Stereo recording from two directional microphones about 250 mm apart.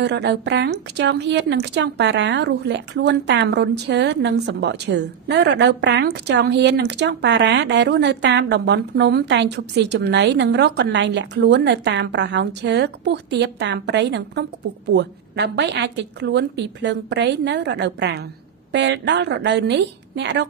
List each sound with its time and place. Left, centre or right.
0.0 s a woman's voice: right